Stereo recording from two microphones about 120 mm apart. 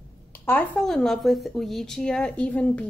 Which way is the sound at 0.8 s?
Centre (ahead or behind).